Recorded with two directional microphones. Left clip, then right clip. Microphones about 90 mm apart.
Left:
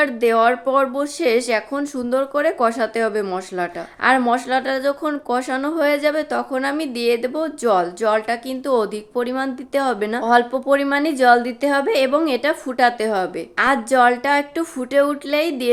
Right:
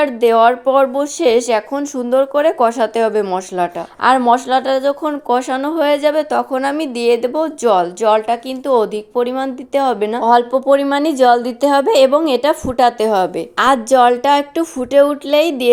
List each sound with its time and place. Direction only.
0.0 s a woman's voice: 20° right (ahead or behind)
10.2 s a woman's voice: 30° right (ahead or behind)